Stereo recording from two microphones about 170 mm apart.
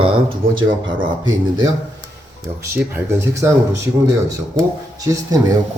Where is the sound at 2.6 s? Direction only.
15° right (ahead or behind).